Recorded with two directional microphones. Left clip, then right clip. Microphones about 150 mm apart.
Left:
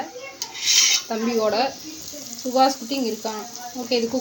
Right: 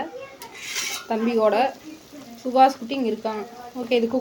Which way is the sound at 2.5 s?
5° right (ahead or behind).